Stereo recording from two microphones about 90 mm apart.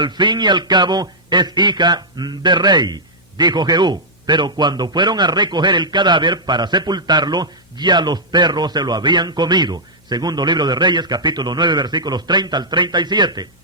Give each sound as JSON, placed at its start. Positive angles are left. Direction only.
{"t": 0.0, "sound": "a man's voice", "side_deg": -60}